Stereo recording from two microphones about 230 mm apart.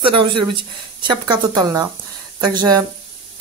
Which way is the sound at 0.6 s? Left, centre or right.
Right.